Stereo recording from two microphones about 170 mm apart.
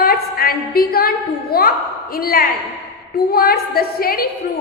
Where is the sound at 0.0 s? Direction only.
60° left (ahead or behind).